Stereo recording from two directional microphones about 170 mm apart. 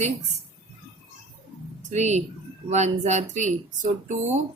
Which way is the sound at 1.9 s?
40° right (ahead or behind).